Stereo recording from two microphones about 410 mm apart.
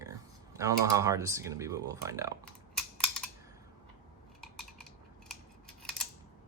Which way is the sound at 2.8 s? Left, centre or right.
Centre.